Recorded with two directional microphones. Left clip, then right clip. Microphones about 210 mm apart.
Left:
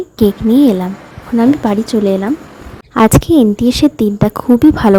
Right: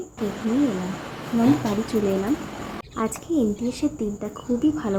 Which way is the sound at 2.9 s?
50° left (ahead or behind).